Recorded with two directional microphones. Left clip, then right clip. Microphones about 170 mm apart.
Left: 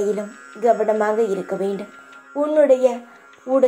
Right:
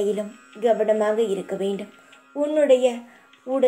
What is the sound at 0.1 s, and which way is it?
Speech, 40° left (ahead or behind).